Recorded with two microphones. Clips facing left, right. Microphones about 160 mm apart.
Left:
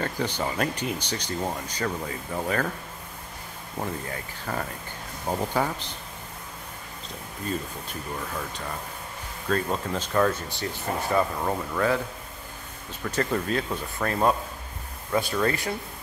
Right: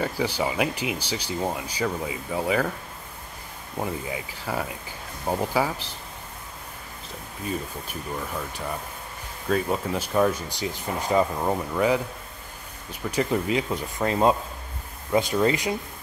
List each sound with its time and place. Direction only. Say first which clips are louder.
0.0 s speech: right 3 dB; 10° right (ahead or behind)
3.8 s speech: right 3 dB; 10° right (ahead or behind)
9.5 s speech: right 2 dB; 10° right (ahead or behind)
13.1 s speech: right 2 dB; 15° right (ahead or behind)